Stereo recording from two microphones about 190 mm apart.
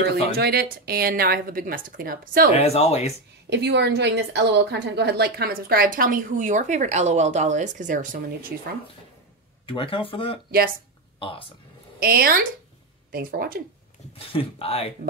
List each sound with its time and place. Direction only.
0.0 s a woman's voice: 60° right (ahead or behind)
2.5 s speech: 35° left (ahead or behind)
3.4 s a woman's voice: 65° right (ahead or behind); by 8.5 s 45° right (ahead or behind)
9.7 s speech: 25° left (ahead or behind)
12.0 s a woman's voice: 50° right (ahead or behind)
14.1 s speech: 30° left (ahead or behind)